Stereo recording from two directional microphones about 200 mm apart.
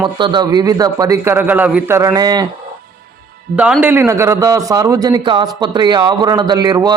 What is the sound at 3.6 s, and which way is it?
Speech, 5° right (ahead or behind).